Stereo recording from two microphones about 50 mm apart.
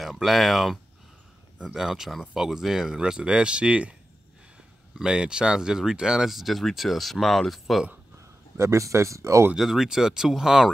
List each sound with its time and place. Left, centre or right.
0.0 s speech: centre; by 3.9 s right
4.9 s speech: centre
8.2 s speech: right
9.6 s speech: centre